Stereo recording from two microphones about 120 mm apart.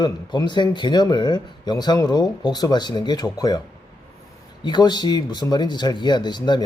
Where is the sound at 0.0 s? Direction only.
40° left (ahead or behind).